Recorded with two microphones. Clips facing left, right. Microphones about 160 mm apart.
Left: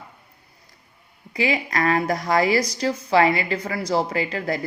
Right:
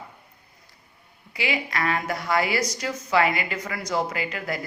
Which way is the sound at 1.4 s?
35° left (ahead or behind).